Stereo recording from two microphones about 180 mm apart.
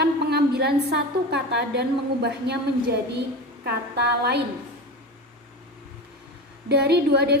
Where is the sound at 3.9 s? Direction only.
65° right (ahead or behind).